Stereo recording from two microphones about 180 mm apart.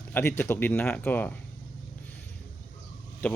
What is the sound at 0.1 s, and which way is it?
A man's voice, 10° left (ahead or behind).